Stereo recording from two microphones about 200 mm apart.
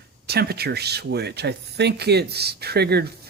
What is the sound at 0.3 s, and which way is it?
Speech, 50° right (ahead or behind).